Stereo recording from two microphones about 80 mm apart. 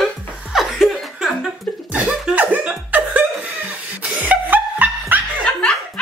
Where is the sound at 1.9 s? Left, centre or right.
Centre.